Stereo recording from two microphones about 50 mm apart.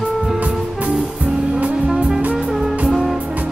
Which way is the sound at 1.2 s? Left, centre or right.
Right.